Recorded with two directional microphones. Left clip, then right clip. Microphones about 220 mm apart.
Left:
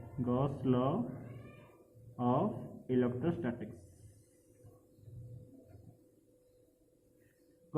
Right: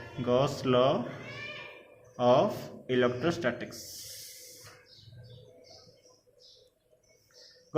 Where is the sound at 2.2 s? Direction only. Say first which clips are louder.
Right 10 dB; 15° right (ahead or behind).